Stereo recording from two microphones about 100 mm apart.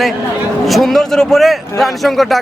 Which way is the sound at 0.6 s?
Centre (ahead or behind).